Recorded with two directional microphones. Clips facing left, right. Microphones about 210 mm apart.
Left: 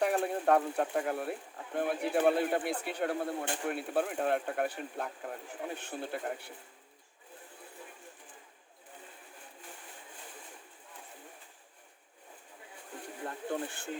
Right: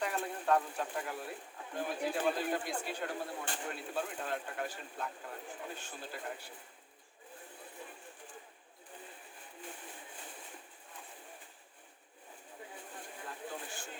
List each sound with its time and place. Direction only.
0.0 s speech: 60° left (ahead or behind)
13.2 s speech: 55° left (ahead or behind)